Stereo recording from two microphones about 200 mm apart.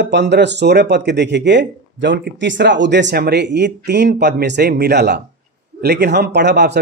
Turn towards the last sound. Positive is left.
turn(degrees=-55)  # may be behind; listen again after turning